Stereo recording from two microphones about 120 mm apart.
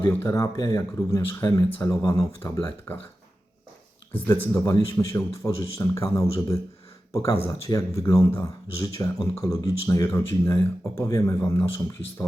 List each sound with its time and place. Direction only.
0.0 s speech: 20° left (ahead or behind)
4.1 s speech: 20° left (ahead or behind)